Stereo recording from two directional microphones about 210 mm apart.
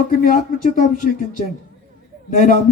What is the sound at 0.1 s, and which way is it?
A man's voice, 40° left (ahead or behind).